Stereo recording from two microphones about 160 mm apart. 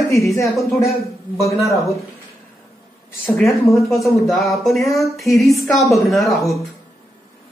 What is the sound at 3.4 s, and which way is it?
Speech, 20° left (ahead or behind).